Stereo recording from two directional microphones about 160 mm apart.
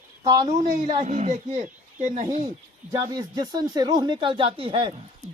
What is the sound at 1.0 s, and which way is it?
Speech, 45° right (ahead or behind).